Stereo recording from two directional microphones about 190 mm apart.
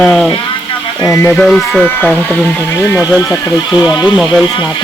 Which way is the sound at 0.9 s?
15° left (ahead or behind).